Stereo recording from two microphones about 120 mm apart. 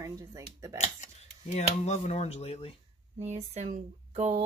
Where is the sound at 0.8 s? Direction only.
70° left (ahead or behind); by 2.7 s 55° left (ahead or behind).